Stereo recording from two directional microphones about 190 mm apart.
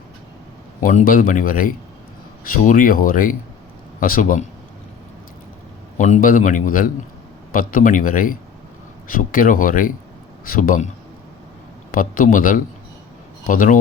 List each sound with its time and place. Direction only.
0.8 s a man's voice: 45° left (ahead or behind)
6.0 s a man's voice: 45° left (ahead or behind)